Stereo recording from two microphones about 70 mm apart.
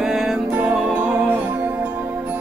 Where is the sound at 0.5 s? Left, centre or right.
Centre.